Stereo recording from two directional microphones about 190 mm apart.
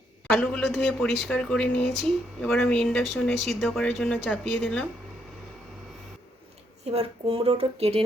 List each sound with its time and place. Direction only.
0.3 s speech: 5° left (ahead or behind)
6.9 s speech: 30° right (ahead or behind)